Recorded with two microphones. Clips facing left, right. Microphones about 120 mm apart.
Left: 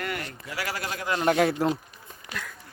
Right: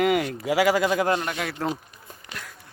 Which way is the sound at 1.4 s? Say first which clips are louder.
Left 8 dB; 40° left (ahead or behind).